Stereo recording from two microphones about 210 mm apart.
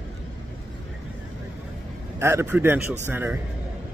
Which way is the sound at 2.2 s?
10° right (ahead or behind).